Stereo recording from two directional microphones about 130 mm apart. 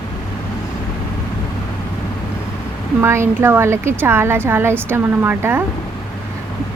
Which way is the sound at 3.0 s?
20° right (ahead or behind).